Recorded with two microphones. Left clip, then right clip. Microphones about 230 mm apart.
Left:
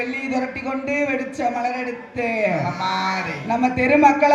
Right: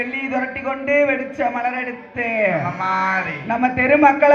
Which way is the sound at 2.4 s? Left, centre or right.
Centre.